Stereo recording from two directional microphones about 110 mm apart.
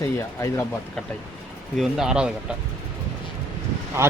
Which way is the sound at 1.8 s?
5° right (ahead or behind).